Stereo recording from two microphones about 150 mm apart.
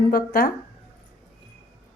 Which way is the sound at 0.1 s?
85° left.